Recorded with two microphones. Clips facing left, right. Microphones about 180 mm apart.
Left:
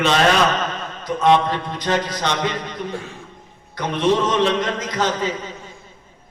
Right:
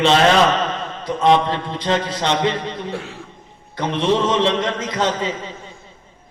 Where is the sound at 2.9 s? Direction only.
70° right (ahead or behind).